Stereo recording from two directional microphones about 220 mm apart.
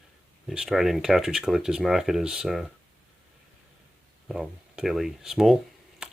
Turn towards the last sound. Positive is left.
turn(degrees=-5)  # may be behind; listen again after turning